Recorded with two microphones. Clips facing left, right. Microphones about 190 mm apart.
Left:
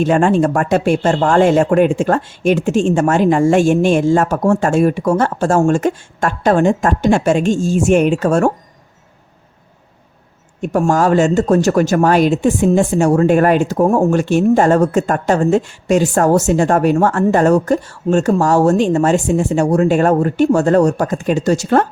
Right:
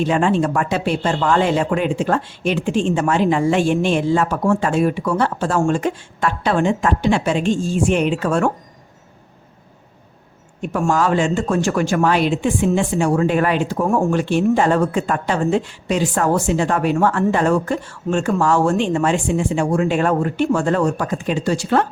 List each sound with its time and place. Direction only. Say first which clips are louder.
0.0 s speech: left 4 dB; 45° left (ahead or behind)
10.6 s speech: left 4 dB; 40° left (ahead or behind)